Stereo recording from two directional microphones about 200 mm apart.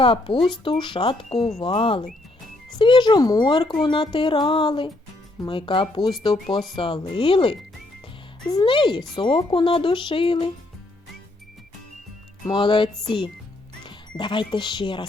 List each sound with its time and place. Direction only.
0.0 s speech: 25° left (ahead or behind)
0.3 s speech: centre (ahead or behind)
0.6 s speech: 25° left (ahead or behind)
12.5 s speech: 25° left (ahead or behind)